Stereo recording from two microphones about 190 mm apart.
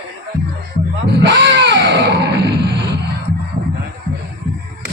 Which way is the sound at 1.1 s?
65° right (ahead or behind).